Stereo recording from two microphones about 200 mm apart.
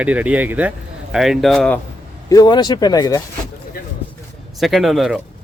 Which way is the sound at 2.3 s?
20° left (ahead or behind).